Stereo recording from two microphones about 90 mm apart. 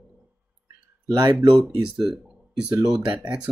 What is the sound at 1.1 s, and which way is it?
Speech, 50° right (ahead or behind).